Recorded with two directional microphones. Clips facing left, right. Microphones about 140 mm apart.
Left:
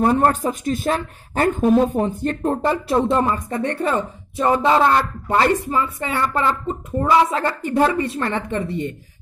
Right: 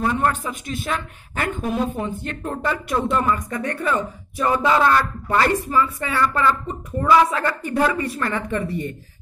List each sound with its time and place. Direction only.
0.0 s speech: 40° left (ahead or behind); by 8.9 s 25° left (ahead or behind)